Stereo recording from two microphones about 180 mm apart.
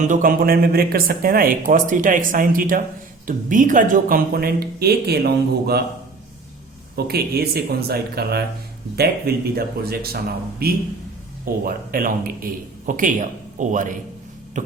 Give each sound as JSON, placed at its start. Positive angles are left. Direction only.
{"t": 0.0, "sound": "speech", "side_deg": -45}
{"t": 6.9, "sound": "speech", "side_deg": -60}
{"t": 14.5, "sound": "hum", "side_deg": -40}